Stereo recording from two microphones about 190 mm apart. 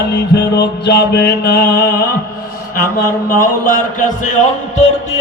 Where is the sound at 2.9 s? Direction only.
45° left (ahead or behind).